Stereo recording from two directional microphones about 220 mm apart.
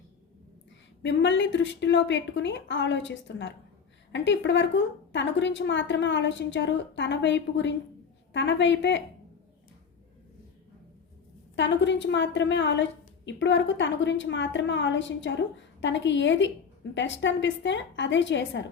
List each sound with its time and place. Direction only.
1.0 s a woman's voice: 55° left (ahead or behind)
11.5 s a woman's voice: 55° left (ahead or behind)